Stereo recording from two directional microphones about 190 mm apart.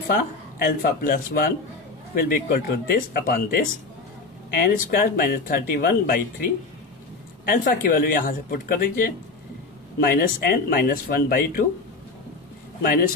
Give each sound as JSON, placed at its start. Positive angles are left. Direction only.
{"t": 0.1, "sound": "speech", "side_deg": 55}
{"t": 12.8, "sound": "speech", "side_deg": 50}